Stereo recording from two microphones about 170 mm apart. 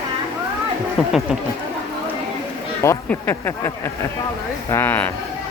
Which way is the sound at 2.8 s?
15° left (ahead or behind).